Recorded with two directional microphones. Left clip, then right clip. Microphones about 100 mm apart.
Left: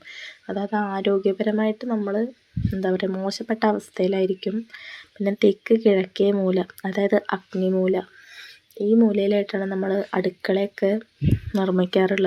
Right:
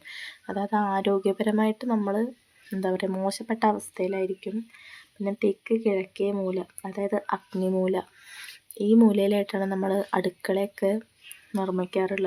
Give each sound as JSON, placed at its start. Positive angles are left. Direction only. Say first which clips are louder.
{"t": 0.0, "sound": "a sound", "louder": "left 1 dB", "side_deg": 0}
{"t": 1.1, "sound": "speech", "louder": "left 3 dB", "side_deg": 0}
{"t": 7.6, "sound": "speech", "louder": "left 5 dB", "side_deg": 5}
{"t": 8.3, "sound": "a sound", "louder": "left 1 dB", "side_deg": -30}
{"t": 9.0, "sound": "speech", "louder": "left 2 dB", "side_deg": -5}
{"t": 11.5, "sound": "speech", "louder": "left 5 dB", "side_deg": 20}